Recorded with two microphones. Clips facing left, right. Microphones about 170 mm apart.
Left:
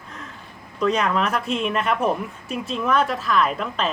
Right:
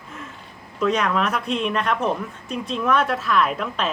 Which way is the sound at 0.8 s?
Centre (ahead or behind).